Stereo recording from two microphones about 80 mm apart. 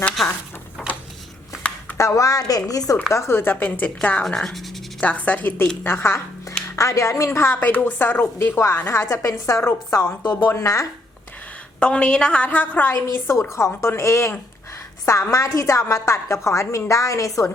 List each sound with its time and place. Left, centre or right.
2.0 s speech: left
3.1 s speech: left
4.2 s speech: centre
4.9 s a woman's voice: centre
8.4 s a woman's voice: left
11.8 s a woman's voice: centre
12.9 s a woman's voice: left